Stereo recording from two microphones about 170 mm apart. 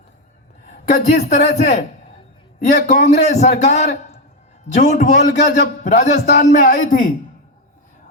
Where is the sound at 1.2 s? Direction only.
45° left (ahead or behind).